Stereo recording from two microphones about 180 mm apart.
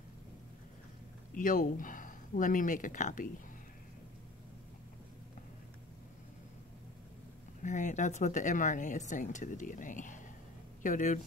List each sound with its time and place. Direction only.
1.3 s speech: 45° left (ahead or behind)
7.6 s speech: 45° left (ahead or behind)